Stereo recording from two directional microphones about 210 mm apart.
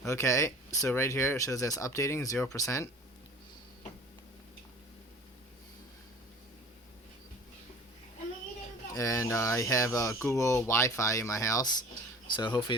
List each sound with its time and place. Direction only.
0.0 s speech: 15° left (ahead or behind)
9.0 s speech: 15° left (ahead or behind)